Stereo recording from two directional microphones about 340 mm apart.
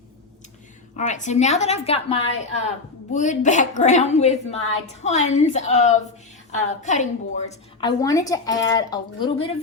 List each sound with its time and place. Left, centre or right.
0.9 s a woman's voice: left